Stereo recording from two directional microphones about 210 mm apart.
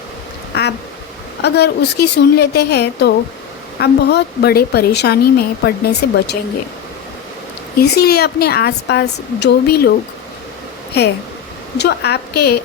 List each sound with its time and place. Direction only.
0.5 s quack: 50° left (ahead or behind)
1.4 s speech: 50° left (ahead or behind)
7.8 s speech: 50° left (ahead or behind)
11.0 s speech: 50° left (ahead or behind)